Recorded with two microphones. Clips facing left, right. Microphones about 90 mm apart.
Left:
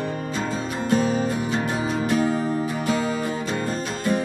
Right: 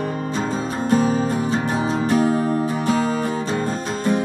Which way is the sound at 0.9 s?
40° right (ahead or behind).